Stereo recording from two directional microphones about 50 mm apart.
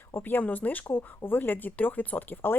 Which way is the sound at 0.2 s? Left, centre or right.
Left.